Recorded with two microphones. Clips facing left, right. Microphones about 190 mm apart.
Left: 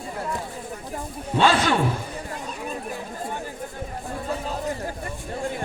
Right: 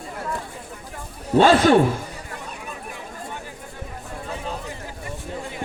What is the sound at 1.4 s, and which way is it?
Speech, 40° right (ahead or behind).